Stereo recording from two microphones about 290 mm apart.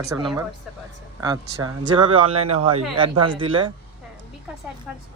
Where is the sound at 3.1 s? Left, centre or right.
Right.